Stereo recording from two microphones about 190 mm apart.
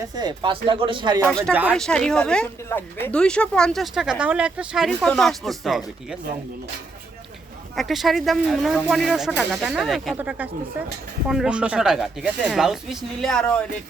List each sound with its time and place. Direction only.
0.0 s speech: 20° right (ahead or behind)
1.3 s speech: 5° left (ahead or behind)
7.8 s speech: centre (ahead or behind)